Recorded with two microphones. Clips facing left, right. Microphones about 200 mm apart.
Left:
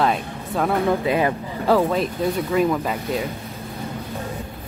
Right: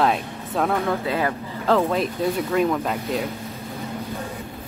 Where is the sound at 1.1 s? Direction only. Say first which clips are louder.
Left 3 dB; 15° left (ahead or behind).